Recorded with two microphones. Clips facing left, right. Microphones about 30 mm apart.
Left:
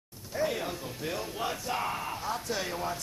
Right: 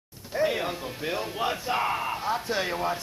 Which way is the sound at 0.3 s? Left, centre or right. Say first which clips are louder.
Right 5 dB; right.